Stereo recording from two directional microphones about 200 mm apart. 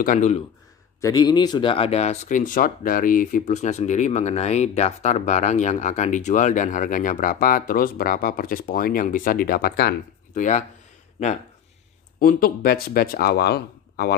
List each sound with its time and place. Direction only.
0.0 s speech: 40° left (ahead or behind)
1.0 s speech: 20° left (ahead or behind); by 10.6 s 40° left (ahead or behind)
12.2 s speech: 45° left (ahead or behind)